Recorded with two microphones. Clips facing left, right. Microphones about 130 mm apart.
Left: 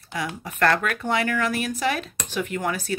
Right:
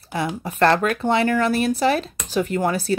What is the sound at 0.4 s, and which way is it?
Speech, 30° right (ahead or behind).